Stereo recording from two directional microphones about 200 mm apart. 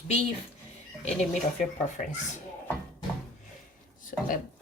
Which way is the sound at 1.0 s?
35° left (ahead or behind).